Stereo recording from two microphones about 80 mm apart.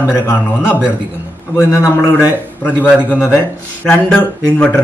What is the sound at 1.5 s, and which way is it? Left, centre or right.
Speech, left.